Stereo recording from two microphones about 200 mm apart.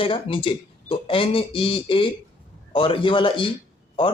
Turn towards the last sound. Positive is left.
turn(degrees=25)  # may be behind; listen again after turning